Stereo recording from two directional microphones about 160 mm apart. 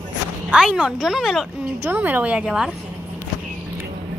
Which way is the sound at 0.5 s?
5° right (ahead or behind).